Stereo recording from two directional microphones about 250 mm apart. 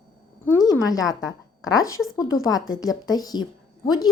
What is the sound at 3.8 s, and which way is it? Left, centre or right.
Speech, left.